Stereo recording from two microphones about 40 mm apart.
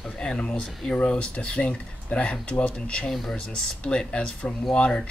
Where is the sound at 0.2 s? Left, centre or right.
Left.